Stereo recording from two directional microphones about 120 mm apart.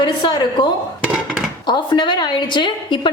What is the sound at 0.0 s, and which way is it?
A woman's voice, 40° left (ahead or behind).